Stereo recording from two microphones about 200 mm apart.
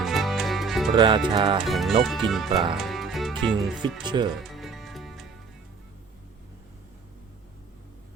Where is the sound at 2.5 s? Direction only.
25° right (ahead or behind).